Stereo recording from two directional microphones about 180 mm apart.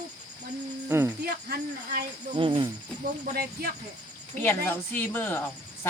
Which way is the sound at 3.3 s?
55° right (ahead or behind).